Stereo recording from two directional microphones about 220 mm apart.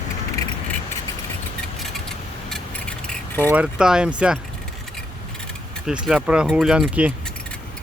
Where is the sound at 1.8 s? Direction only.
Centre (ahead or behind).